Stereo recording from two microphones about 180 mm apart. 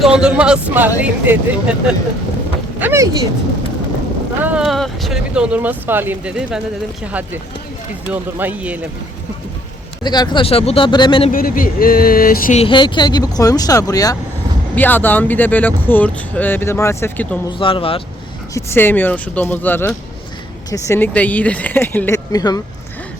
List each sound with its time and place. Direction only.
0.2 s speech: 5° right (ahead or behind)
4.4 s speech: 5° right (ahead or behind)
8.1 s speech: 10° right (ahead or behind)
10.0 s speech: 25° left (ahead or behind)
11.3 s speech: 50° left (ahead or behind)
12.5 s speech: 30° left (ahead or behind)
17.6 s speech: 30° left (ahead or behind)
18.5 s speech: 10° left (ahead or behind)